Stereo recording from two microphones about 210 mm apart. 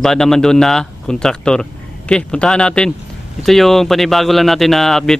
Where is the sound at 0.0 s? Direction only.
Centre (ahead or behind).